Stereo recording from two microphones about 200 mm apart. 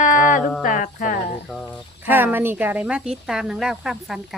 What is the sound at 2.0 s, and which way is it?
Speech, 10° right (ahead or behind).